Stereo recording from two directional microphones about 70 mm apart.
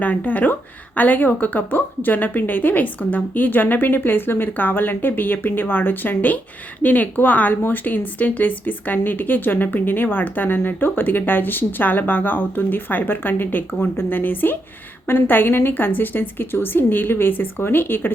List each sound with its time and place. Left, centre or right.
0.0 s a woman's voice: left